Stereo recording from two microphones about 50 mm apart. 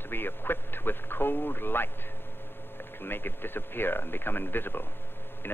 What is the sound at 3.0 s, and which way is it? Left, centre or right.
A man's voice, left.